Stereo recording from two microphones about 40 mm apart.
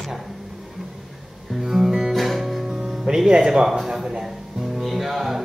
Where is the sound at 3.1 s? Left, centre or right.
Centre.